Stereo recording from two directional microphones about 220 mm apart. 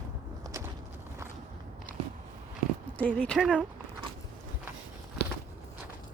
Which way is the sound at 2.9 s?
5° left (ahead or behind).